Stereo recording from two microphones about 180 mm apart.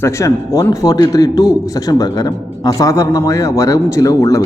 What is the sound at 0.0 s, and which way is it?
A man's voice, 15° left (ahead or behind).